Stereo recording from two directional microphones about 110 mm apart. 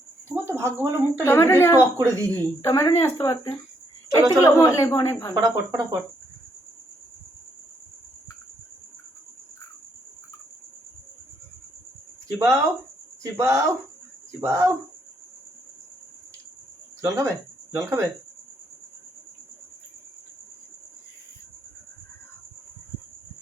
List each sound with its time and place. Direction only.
0.3 s a sound: 25° right (ahead or behind)
1.2 s speech: 20° left (ahead or behind)
1.8 s speech: 25° right (ahead or behind)
2.3 s speech: 25° left (ahead or behind)
5.3 s speech: 30° right (ahead or behind)
12.4 s speech: 30° right (ahead or behind)
17.0 s speech: 30° right (ahead or behind)